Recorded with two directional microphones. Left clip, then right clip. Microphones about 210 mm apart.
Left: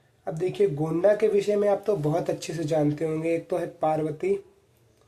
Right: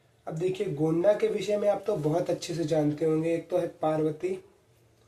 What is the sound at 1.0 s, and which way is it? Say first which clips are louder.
Speech: left 6 dB; 55° left (ahead or behind).